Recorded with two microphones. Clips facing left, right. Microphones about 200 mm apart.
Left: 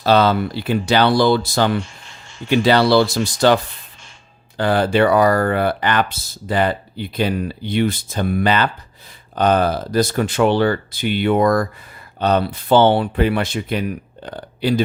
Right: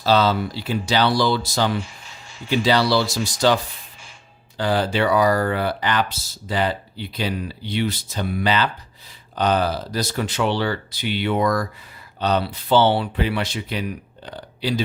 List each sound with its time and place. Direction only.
0.0 s speech: 55° left (ahead or behind)